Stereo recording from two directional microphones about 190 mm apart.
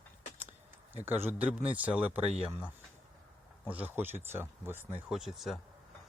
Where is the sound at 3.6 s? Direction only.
10° right (ahead or behind).